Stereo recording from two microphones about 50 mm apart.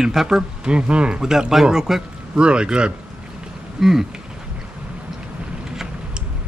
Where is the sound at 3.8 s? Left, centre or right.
Centre.